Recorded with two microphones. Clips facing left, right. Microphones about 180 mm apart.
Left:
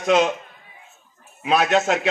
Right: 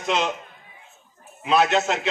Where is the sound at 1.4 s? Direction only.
55° left (ahead or behind).